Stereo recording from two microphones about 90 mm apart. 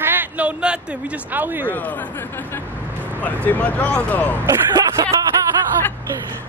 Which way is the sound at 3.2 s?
20° left (ahead or behind).